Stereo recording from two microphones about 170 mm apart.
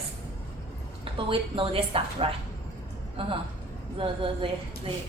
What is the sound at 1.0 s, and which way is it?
A woman's voice, 30° right (ahead or behind).